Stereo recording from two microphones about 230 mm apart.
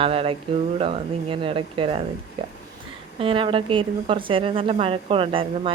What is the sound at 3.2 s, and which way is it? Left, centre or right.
Speech, right.